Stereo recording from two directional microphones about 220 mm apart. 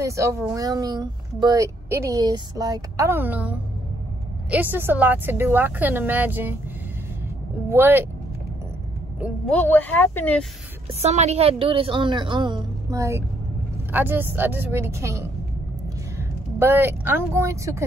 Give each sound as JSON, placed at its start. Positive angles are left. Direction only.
{"t": 0.0, "sound": "speech", "side_deg": -15}
{"t": 7.7, "sound": "speech", "side_deg": -10}
{"t": 9.5, "sound": "speech", "side_deg": 10}
{"t": 11.0, "sound": "a woman's voice", "side_deg": -30}